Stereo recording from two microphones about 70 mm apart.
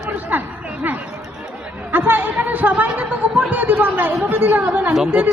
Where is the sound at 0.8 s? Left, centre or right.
Right.